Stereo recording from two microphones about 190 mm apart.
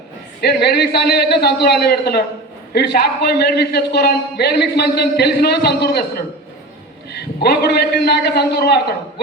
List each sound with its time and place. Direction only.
0.4 s a man's voice: 60° left (ahead or behind)
7.4 s a man's voice: 60° left (ahead or behind)